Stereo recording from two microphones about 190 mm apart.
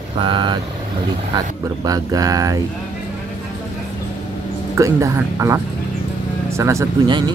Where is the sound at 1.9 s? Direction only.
20° right (ahead or behind).